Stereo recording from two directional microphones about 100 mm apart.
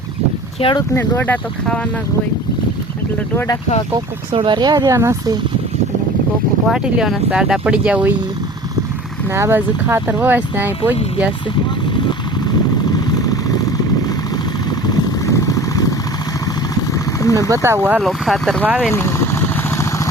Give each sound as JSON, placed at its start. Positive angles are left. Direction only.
{"t": 0.6, "sound": "speech", "side_deg": 70}
{"t": 0.9, "sound": "speech", "side_deg": 20}
{"t": 3.3, "sound": "speech", "side_deg": 35}
{"t": 4.3, "sound": "speech", "side_deg": -55}
{"t": 4.9, "sound": "speech", "side_deg": -30}
{"t": 6.7, "sound": "speech", "side_deg": -10}
{"t": 9.3, "sound": "speech", "side_deg": -25}
{"t": 12.5, "sound": "vehicle", "side_deg": 40}
{"t": 14.7, "sound": "vehicle", "side_deg": 40}
{"t": 17.5, "sound": "speech", "side_deg": -30}
{"t": 18.0, "sound": "speech", "side_deg": 0}
{"t": 18.6, "sound": "speech", "side_deg": -15}
{"t": 18.9, "sound": "vehicle", "side_deg": 25}